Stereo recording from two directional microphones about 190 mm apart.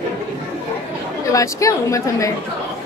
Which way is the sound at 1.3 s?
15° left (ahead or behind).